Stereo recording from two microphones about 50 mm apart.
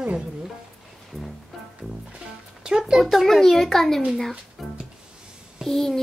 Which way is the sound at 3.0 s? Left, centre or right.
Centre.